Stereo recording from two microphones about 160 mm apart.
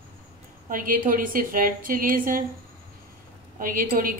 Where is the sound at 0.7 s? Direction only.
60° right (ahead or behind).